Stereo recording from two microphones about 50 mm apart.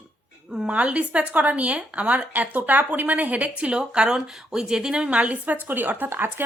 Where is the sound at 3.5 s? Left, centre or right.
Centre; by 6.4 s right.